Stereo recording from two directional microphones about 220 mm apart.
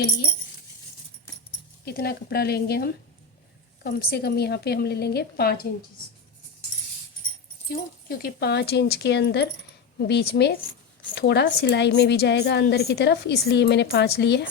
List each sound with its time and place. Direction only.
1.8 s a woman's voice: 45° left (ahead or behind)
8.0 s a woman's voice: 45° left (ahead or behind)